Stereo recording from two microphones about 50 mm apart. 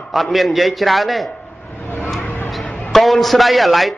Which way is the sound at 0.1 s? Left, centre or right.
Centre.